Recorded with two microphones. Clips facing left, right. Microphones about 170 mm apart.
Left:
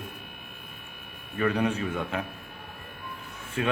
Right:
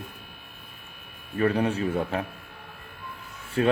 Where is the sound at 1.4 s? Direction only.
35° right (ahead or behind).